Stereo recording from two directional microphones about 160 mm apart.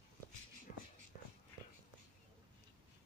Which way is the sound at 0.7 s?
65° left (ahead or behind).